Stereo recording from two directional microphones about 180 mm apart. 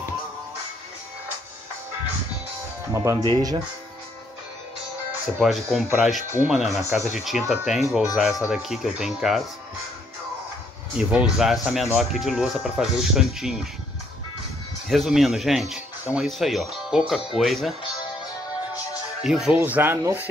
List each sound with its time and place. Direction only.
2.9 s speech: 15° right (ahead or behind)
5.4 s speech: centre (ahead or behind)
11.0 s speech: 5° right (ahead or behind)
14.9 s speech: centre (ahead or behind)
19.2 s speech: 5° right (ahead or behind)